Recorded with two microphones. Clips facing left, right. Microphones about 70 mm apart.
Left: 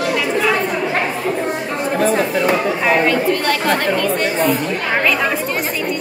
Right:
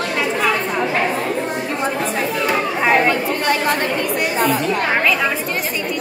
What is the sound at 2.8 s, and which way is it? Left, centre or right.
Speech, right.